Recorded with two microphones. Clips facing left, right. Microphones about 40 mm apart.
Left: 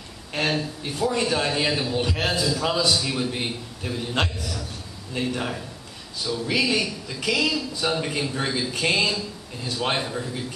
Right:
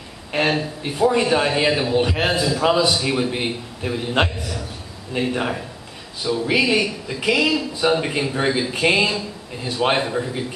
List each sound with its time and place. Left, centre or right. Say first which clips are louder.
0.3 s a man's voice: right 5 dB; right